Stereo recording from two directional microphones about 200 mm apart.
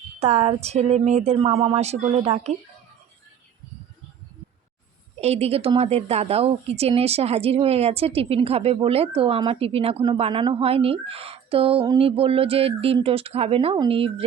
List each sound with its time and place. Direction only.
0.2 s a woman's voice: 30° right (ahead or behind)
5.2 s a woman's voice: 30° right (ahead or behind)